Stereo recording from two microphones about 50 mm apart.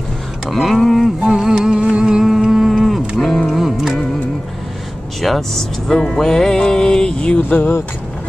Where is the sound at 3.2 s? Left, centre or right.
Centre.